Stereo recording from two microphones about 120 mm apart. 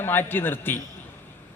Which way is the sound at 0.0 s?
15° left (ahead or behind).